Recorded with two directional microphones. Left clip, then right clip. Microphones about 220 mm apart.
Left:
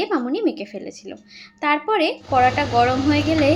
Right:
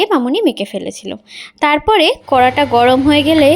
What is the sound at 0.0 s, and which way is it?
A woman's voice, 40° right (ahead or behind).